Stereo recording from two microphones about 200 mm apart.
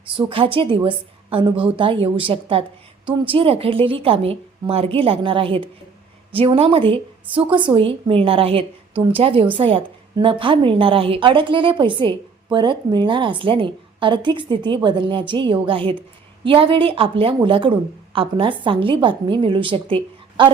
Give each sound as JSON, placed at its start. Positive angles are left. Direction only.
{"t": 0.1, "sound": "a woman's voice", "side_deg": -25}